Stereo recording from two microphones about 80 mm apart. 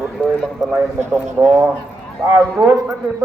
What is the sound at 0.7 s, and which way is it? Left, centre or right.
A man's voice, right.